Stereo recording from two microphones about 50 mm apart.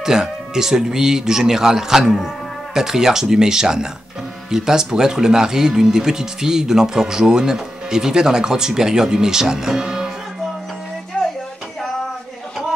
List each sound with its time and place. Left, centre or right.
0.0 s speech: centre
11.1 s music: left